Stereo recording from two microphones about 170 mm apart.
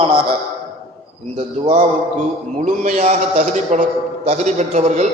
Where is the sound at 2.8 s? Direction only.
45° right (ahead or behind).